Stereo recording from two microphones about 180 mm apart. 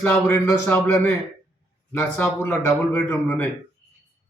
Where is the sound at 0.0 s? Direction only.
10° left (ahead or behind).